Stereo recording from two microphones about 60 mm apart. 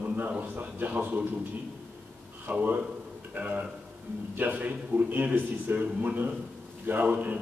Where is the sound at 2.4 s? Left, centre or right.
Right.